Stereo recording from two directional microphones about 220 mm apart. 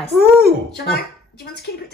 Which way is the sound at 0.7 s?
50° left (ahead or behind).